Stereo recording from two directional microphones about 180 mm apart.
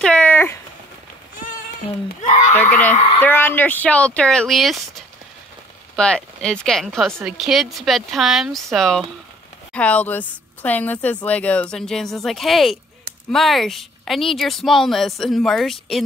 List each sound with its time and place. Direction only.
0.0 s a sound: 5° left (ahead or behind)
2.2 s speech: 40° left (ahead or behind)
2.7 s speech: 10° left (ahead or behind)
7.1 s a woman's voice: 15° right (ahead or behind)
7.3 s speech: centre (ahead or behind)